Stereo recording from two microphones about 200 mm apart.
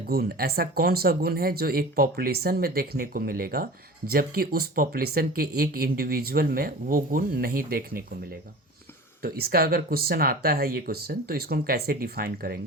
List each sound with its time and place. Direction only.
0.1 s speech: 50° right (ahead or behind)
9.2 s speech: 50° right (ahead or behind)